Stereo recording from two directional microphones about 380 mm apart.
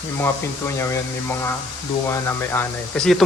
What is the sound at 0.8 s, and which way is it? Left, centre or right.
Speech, centre.